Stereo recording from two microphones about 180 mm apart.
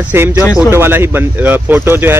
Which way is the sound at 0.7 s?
15° right (ahead or behind).